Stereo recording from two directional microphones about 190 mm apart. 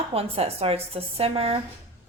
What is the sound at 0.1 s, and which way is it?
A woman's voice, 30° right (ahead or behind).